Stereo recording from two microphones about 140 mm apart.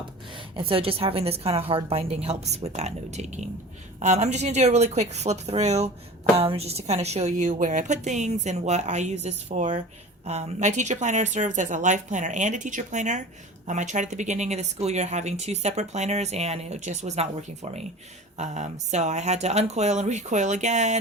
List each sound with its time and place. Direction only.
0.5 s a woman's voice: 40° right (ahead or behind)
18.3 s a woman's voice: 55° right (ahead or behind)